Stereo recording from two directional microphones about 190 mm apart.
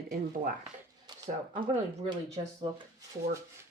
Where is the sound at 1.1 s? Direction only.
20° right (ahead or behind).